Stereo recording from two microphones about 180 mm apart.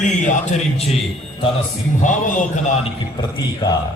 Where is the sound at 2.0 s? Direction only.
45° left (ahead or behind).